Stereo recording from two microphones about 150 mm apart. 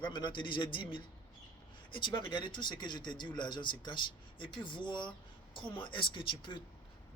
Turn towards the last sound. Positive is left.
turn(degrees=30)  # may be behind; listen again after turning